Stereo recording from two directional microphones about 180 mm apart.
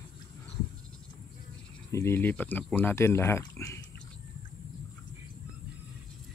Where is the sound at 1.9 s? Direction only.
15° left (ahead or behind).